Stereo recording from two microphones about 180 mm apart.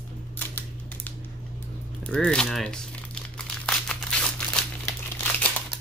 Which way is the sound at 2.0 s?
5° left (ahead or behind).